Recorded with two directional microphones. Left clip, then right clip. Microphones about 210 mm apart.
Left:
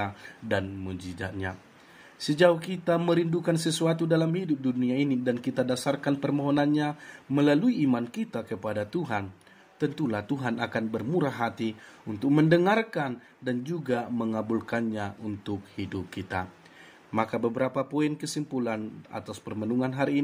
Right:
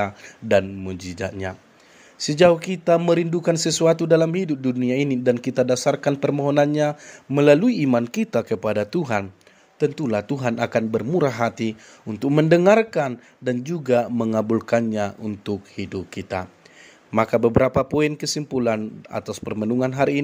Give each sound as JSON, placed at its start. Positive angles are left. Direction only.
{"t": 0.0, "sound": "speech", "side_deg": -35}